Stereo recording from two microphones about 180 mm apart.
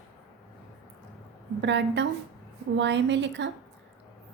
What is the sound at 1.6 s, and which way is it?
A woman's voice, 80° right.